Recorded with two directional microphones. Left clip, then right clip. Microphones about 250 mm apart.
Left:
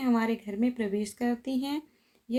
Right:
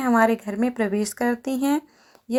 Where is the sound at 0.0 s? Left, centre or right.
Right.